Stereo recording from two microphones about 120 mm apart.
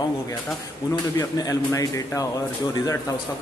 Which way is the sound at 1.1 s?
30° left (ahead or behind).